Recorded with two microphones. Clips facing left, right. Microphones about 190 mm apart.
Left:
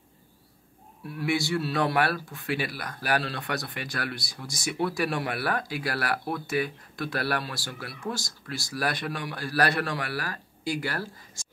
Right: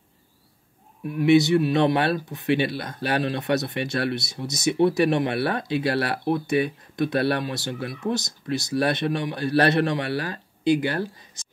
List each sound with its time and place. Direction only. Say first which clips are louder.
1.0 s speech: right 11 dB; 20° right (ahead or behind)